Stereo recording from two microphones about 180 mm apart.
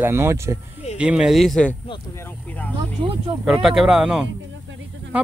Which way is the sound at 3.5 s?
Centre (ahead or behind).